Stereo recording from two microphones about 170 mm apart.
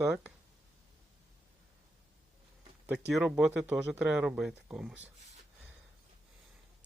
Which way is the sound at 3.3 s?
5° right (ahead or behind).